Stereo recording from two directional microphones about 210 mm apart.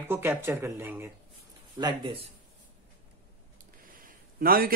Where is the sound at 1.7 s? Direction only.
20° right (ahead or behind).